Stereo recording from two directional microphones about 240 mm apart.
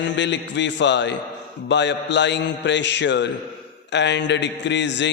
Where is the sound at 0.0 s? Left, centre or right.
Left.